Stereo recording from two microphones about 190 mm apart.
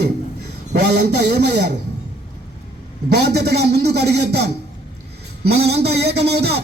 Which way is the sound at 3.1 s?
60° right (ahead or behind).